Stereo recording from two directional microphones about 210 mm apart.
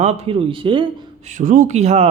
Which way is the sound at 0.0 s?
30° right (ahead or behind).